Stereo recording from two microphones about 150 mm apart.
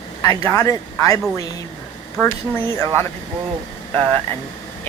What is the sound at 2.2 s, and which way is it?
Speech, 15° left (ahead or behind).